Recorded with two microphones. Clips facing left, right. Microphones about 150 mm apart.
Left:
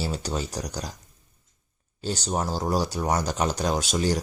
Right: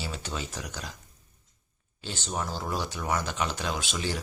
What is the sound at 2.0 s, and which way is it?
Speech, 40° left (ahead or behind).